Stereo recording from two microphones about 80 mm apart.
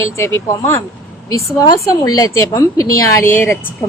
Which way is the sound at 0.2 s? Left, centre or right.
Left.